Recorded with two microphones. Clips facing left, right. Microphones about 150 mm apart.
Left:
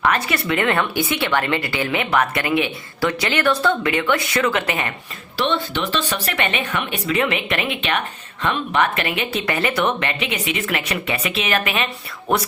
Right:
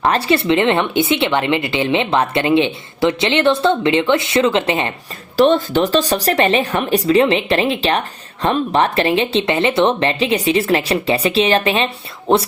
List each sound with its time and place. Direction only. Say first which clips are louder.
0.0 s speech: right 5 dB; 30° right (ahead or behind)
5.4 s speech: right 9 dB; 45° right (ahead or behind)